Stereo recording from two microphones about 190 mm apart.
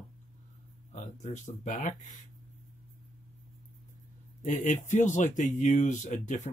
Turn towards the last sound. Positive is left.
turn(degrees=40)  # may be behind; listen again after turning